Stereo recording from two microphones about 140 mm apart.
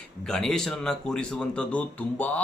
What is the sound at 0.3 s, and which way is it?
A man's voice, 5° left (ahead or behind).